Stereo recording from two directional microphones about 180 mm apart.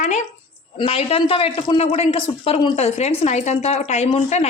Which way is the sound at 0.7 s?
30° left (ahead or behind).